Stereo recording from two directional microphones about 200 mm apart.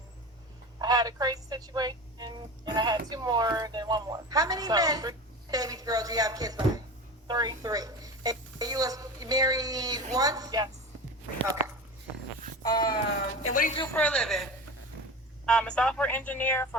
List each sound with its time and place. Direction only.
0.8 s a woman's voice: 20° right (ahead or behind)
12.6 s a sound: 20° left (ahead or behind)
13.5 s speech: 40° left (ahead or behind)
13.9 s a woman's voice: 5° left (ahead or behind)
15.4 s speech: 5° left (ahead or behind)